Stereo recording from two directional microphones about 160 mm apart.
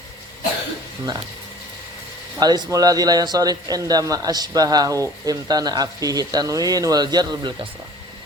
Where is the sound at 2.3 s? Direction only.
25° right (ahead or behind).